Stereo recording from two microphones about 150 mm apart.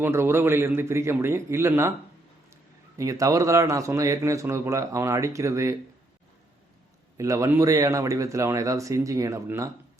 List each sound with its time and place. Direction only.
0.0 s a man's voice: 15° right (ahead or behind)
3.0 s a man's voice: 20° right (ahead or behind)
7.2 s a man's voice: 20° right (ahead or behind)